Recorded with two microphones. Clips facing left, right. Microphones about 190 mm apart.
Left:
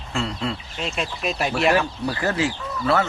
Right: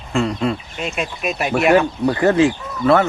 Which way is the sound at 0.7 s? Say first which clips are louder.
Right 3 dB; 10° right (ahead or behind).